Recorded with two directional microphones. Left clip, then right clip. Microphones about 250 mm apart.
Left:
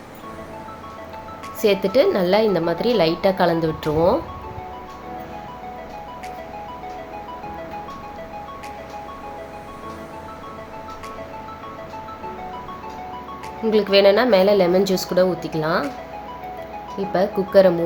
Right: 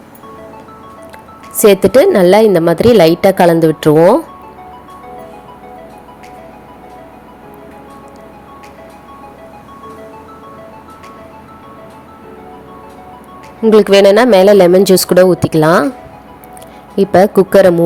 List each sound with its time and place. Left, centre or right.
1.5 s a woman's voice: right
13.7 s speech: right
17.0 s speech: right